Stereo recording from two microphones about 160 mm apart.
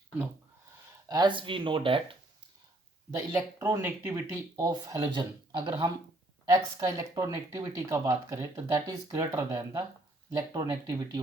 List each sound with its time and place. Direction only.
1.0 s speech: 25° right (ahead or behind)
3.2 s speech: 15° right (ahead or behind)